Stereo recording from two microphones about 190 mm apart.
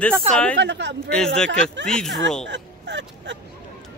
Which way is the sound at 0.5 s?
65° right (ahead or behind).